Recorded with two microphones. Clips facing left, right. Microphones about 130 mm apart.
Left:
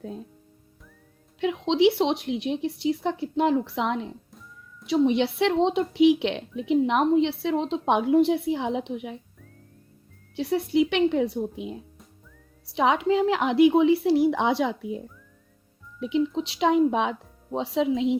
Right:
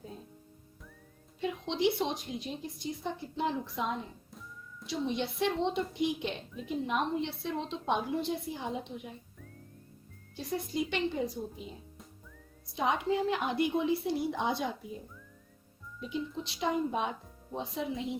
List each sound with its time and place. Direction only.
1.4 s a woman's voice: 85° left
10.3 s a woman's voice: 70° left (ahead or behind)
12.6 s speech: 90° left